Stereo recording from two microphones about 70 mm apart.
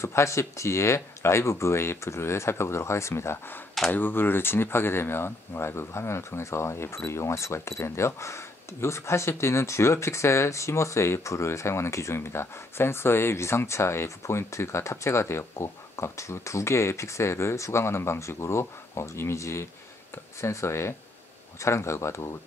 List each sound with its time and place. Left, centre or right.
0.0 s speech: left